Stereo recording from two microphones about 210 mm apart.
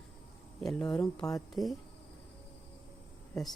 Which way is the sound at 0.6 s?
Centre (ahead or behind).